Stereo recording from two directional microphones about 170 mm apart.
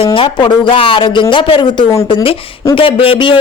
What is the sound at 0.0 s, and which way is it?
A woman's voice, 30° left (ahead or behind).